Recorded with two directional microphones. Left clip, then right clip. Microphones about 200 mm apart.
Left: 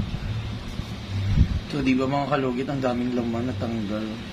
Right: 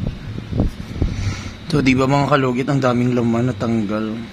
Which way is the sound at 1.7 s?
50° right (ahead or behind).